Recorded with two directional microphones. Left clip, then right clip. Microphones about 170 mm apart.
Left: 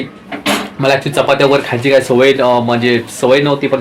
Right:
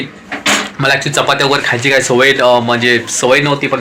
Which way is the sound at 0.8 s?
Centre (ahead or behind).